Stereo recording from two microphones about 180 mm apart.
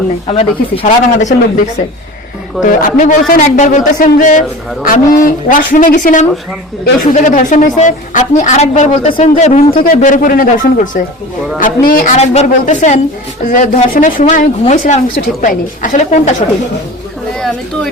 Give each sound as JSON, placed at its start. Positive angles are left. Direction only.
{"t": 0.8, "sound": "speech", "side_deg": 40}
{"t": 2.6, "sound": "a woman's voice", "side_deg": 45}
{"t": 9.7, "sound": "speech", "side_deg": 50}